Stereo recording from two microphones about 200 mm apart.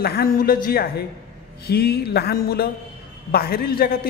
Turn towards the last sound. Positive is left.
turn(degrees=50)  # may be behind; listen again after turning